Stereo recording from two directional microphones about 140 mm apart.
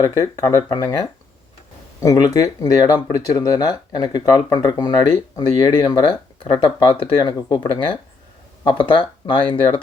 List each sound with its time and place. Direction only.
0.0 s speech: 25° left (ahead or behind)